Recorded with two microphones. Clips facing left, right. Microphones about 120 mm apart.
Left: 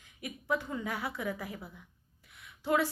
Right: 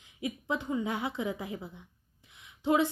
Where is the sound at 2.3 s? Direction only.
20° right (ahead or behind).